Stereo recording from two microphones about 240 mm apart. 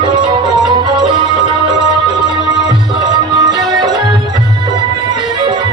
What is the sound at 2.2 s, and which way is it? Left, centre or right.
Music, centre.